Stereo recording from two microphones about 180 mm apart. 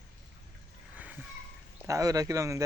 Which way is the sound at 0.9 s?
10° right (ahead or behind).